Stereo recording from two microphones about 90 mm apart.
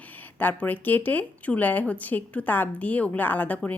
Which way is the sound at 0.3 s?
20° left (ahead or behind).